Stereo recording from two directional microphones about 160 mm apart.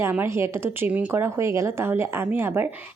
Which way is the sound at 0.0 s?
15° right (ahead or behind).